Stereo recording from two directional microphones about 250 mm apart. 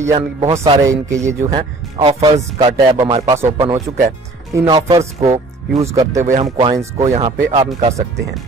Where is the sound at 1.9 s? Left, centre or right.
Right.